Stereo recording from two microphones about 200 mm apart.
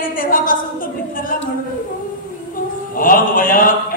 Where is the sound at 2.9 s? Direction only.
45° left (ahead or behind).